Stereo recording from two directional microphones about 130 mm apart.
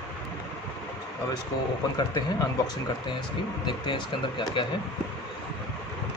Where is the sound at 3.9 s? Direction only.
40° left (ahead or behind).